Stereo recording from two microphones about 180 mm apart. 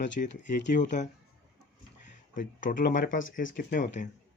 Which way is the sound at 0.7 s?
45° left (ahead or behind).